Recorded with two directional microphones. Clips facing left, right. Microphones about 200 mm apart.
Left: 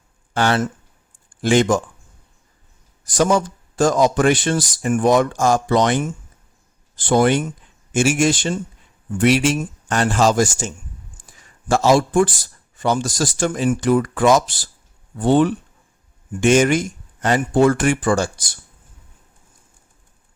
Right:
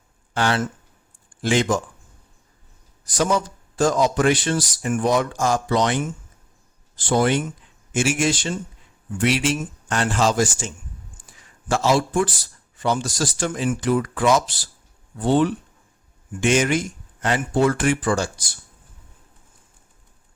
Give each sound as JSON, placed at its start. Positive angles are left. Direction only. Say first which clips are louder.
{"t": 0.3, "sound": "speech", "louder": "left 3 dB", "side_deg": 55}
{"t": 3.2, "sound": "speech", "louder": "left 4 dB", "side_deg": 50}
{"t": 7.1, "sound": "speech", "louder": "left 4 dB", "side_deg": 60}
{"t": 8.0, "sound": "speech", "louder": "left 4 dB", "side_deg": 45}
{"t": 11.7, "sound": "speech", "louder": "left 4 dB", "side_deg": 45}